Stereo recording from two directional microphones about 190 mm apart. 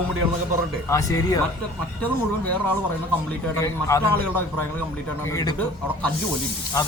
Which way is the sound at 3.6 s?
15° left (ahead or behind).